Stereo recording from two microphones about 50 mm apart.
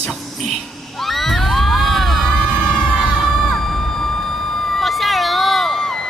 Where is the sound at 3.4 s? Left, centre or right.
Centre.